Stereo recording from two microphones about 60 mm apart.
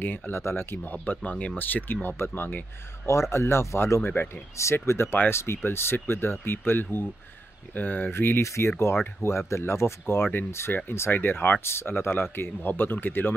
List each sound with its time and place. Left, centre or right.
0.0 s speech: left
1.1 s speech: left
1.6 s speech: left
3.1 s speech: left
8.1 s speech: left